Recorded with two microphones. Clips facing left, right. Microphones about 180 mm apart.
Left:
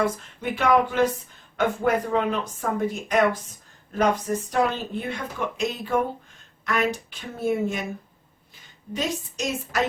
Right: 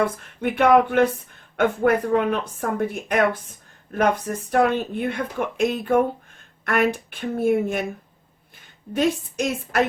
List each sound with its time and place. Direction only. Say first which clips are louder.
0.4 s speech: right 4 dB; 60° right (ahead or behind)
4.5 s speech: right 6 dB; 55° right (ahead or behind)
8.9 s speech: right 7 dB; 55° right (ahead or behind)